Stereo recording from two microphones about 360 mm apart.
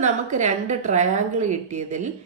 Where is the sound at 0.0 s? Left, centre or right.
Centre.